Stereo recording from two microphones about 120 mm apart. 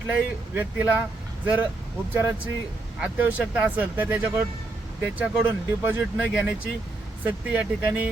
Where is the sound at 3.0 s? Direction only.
10° right (ahead or behind).